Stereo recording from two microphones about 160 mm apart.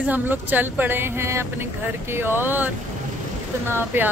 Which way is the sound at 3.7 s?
15° right (ahead or behind).